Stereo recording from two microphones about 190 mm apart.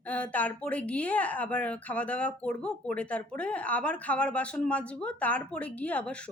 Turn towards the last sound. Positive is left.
turn(degrees=5)  # may be behind; listen again after turning